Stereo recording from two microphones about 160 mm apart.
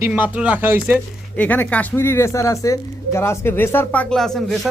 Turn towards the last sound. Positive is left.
turn(degrees=0)  # may be behind; listen again after turning